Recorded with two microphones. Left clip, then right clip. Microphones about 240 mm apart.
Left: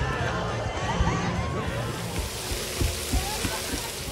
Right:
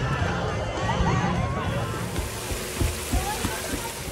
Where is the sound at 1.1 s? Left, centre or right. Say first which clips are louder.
Right 3 dB; centre.